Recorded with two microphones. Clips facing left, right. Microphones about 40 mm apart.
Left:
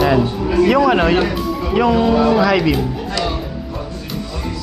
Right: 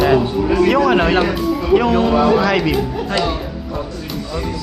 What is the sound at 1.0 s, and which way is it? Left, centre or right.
Speech, centre.